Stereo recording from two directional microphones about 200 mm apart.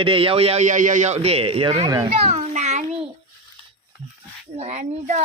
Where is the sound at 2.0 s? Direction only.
30° right (ahead or behind).